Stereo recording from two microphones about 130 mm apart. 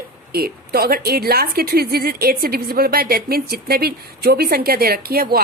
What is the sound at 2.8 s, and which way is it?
Speech, 90° right.